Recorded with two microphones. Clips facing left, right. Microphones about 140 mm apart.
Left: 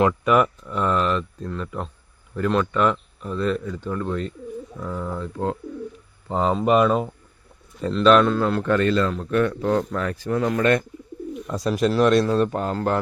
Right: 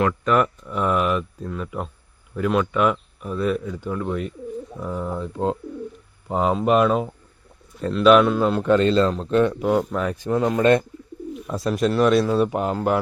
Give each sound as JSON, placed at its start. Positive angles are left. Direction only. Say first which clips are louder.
{"t": 0.3, "sound": "speech", "louder": "left 1 dB", "side_deg": 0}
{"t": 6.2, "sound": "a man's voice", "louder": "even", "side_deg": -5}
{"t": 11.3, "sound": "speech", "louder": "even", "side_deg": 0}